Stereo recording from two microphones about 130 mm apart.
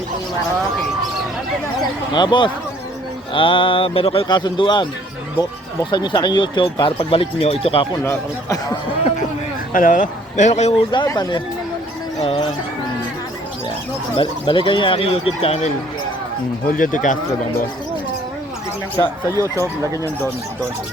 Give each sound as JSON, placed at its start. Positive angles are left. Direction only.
{"t": 2.1, "sound": "speech", "side_deg": 35}
{"t": 4.3, "sound": "speech", "side_deg": 35}
{"t": 5.9, "sound": "speech", "side_deg": 35}
{"t": 8.0, "sound": "speech", "side_deg": 20}
{"t": 9.7, "sound": "speech", "side_deg": 90}
{"t": 10.9, "sound": "speech", "side_deg": 30}
{"t": 14.2, "sound": "speech", "side_deg": 40}
{"t": 16.6, "sound": "speech", "side_deg": 90}
{"t": 19.3, "sound": "speech", "side_deg": -25}